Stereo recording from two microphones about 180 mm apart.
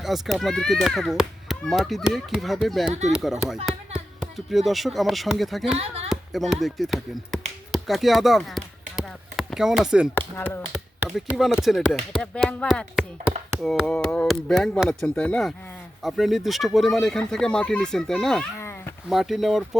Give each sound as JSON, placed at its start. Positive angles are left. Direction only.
{"t": 0.0, "sound": "a child's voice", "side_deg": 0}
{"t": 5.7, "sound": "speech", "side_deg": -35}
{"t": 6.1, "sound": "speech", "side_deg": 0}
{"t": 7.7, "sound": "chop", "side_deg": 0}
{"t": 10.2, "sound": "speech", "side_deg": 10}
{"t": 10.7, "sound": "a child's voice", "side_deg": 0}
{"t": 18.5, "sound": "a sound", "side_deg": 15}
{"t": 19.0, "sound": "a child's voice", "side_deg": 0}